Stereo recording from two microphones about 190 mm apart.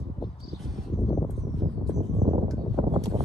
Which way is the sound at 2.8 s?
25° right (ahead or behind).